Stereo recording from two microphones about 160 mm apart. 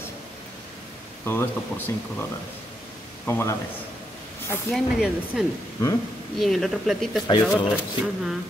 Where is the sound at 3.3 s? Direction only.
15° left (ahead or behind).